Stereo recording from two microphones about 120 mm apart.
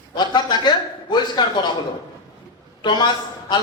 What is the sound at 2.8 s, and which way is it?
Speech, 40° left (ahead or behind).